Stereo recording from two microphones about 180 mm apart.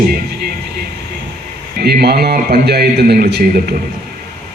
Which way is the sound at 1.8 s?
60° right (ahead or behind).